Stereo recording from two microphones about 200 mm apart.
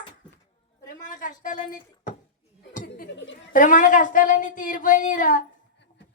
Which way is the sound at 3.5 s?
40° left (ahead or behind).